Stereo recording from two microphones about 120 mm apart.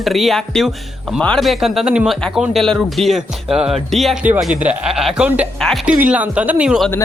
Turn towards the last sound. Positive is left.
turn(degrees=-10)  # may be behind; listen again after turning